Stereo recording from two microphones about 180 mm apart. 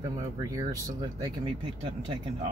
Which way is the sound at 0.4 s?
20° right (ahead or behind).